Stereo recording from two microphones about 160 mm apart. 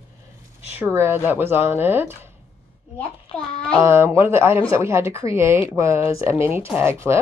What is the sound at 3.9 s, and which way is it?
Speech, 15° right (ahead or behind).